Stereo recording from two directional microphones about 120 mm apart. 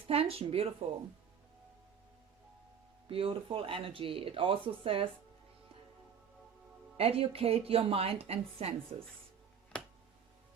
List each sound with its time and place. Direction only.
0.1 s speech: 55° right (ahead or behind)
3.1 s speech: 50° right (ahead or behind)
6.9 s a woman's voice: 55° right (ahead or behind)